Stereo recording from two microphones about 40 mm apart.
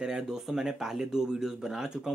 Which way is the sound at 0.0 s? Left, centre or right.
Centre.